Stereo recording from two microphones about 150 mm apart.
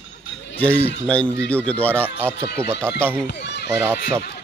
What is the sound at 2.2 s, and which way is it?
Speech, 15° right (ahead or behind).